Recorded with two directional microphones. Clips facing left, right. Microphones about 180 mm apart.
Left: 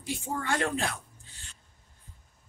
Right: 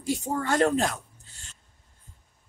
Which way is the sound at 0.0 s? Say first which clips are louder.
Right 6 dB; 40° right (ahead or behind).